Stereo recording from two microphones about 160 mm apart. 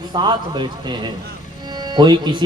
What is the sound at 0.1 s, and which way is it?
Speech, 30° right (ahead or behind).